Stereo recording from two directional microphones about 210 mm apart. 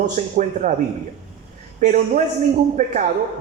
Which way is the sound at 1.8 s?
35° right (ahead or behind).